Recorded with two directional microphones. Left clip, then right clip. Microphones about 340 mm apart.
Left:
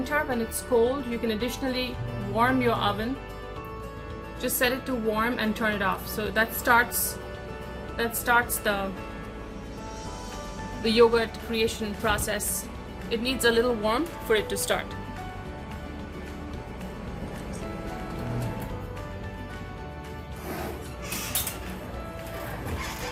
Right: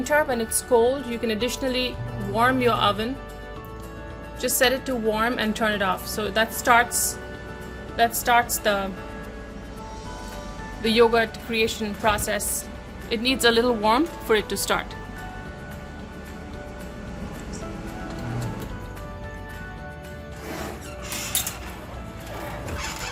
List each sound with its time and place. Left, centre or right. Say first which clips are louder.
0.0 s a woman's voice: right 5 dB; right
4.4 s a woman's voice: right 5 dB; right
7.9 s a woman's voice: right 4 dB; right
10.8 s a woman's voice: right 2 dB; right